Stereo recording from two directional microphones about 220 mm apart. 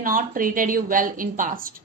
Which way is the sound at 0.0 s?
40° right (ahead or behind).